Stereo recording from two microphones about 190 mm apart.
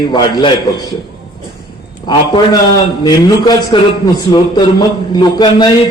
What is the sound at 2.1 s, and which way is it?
A man's voice, 25° left (ahead or behind).